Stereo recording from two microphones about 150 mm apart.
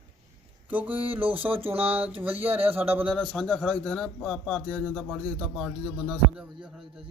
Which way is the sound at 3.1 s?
Centre (ahead or behind).